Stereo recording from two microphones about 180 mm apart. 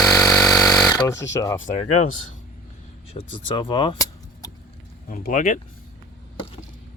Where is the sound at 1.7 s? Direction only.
40° left (ahead or behind).